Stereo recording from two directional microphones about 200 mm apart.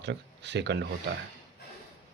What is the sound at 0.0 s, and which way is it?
Speech, 60° right (ahead or behind).